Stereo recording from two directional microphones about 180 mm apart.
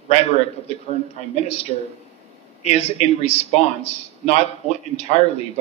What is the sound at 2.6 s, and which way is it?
A man's voice, 35° left (ahead or behind).